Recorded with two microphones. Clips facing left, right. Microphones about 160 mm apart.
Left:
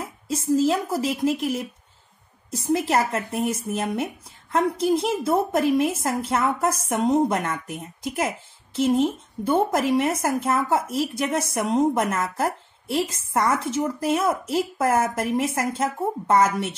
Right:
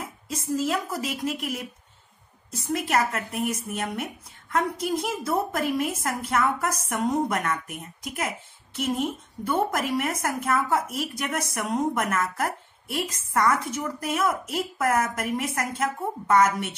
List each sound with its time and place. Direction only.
0.3 s a woman's voice: 30° left (ahead or behind)